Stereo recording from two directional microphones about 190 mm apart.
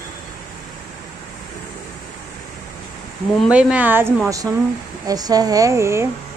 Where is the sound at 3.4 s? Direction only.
5° right (ahead or behind).